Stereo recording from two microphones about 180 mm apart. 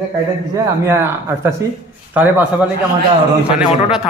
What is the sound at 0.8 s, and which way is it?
A man's voice, 15° right (ahead or behind).